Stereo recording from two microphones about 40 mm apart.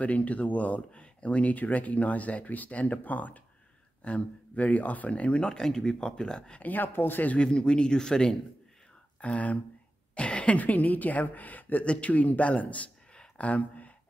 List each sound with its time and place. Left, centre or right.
0.0 s speech: left
4.0 s speech: left
5.5 s speech: centre
6.6 s speech: left
7.3 s speech: left
9.2 s speech: left
10.1 s a sound: left
10.6 s speech: left
11.8 s speech: left